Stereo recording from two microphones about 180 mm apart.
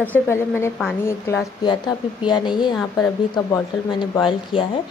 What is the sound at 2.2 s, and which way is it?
A woman's voice, 25° left (ahead or behind).